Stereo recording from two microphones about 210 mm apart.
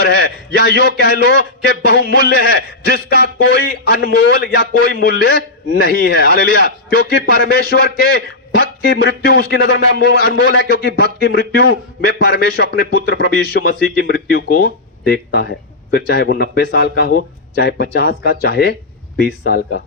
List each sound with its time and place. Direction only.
0.0 s a man's voice: 50° left (ahead or behind)